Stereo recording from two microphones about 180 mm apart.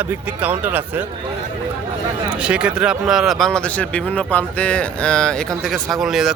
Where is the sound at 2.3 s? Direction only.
5° right (ahead or behind).